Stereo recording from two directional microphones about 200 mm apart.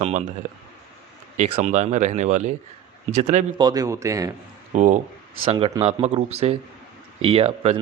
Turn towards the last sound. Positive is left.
turn(degrees=-30)  # may be behind; listen again after turning